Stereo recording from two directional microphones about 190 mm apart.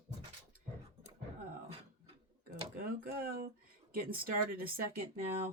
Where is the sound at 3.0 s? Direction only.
50° right (ahead or behind).